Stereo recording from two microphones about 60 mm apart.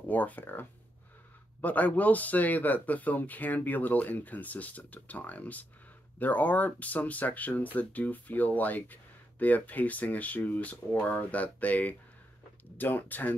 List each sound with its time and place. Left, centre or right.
0.1 s speech: left